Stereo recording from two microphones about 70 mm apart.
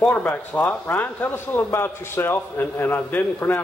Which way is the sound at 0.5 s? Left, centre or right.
Left.